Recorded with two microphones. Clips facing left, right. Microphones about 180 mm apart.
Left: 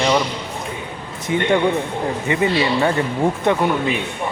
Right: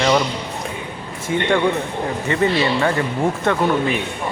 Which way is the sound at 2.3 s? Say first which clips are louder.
Even; 15° left (ahead or behind).